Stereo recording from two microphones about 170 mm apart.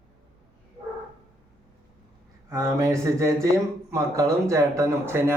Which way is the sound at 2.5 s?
20° right (ahead or behind).